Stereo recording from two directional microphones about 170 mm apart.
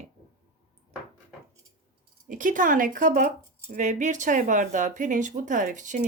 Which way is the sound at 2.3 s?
50° right (ahead or behind).